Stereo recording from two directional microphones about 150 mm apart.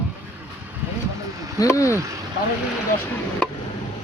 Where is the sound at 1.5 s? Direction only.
20° left (ahead or behind).